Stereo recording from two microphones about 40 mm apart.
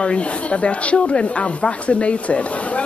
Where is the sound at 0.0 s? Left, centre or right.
Left.